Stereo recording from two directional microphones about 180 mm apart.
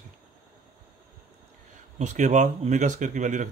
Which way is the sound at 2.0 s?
40° right (ahead or behind).